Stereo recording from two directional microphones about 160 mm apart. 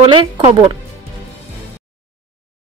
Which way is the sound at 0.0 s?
35° right (ahead or behind).